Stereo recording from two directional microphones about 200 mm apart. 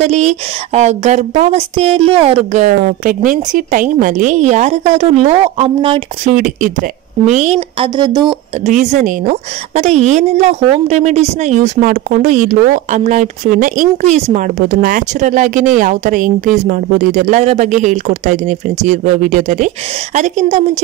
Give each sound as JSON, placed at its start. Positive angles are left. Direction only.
{"t": 0.0, "sound": "a woman's voice", "side_deg": -35}
{"t": 6.3, "sound": "speech", "side_deg": -45}
{"t": 7.3, "sound": "a woman's voice", "side_deg": -30}
{"t": 8.6, "sound": "a woman's voice", "side_deg": -40}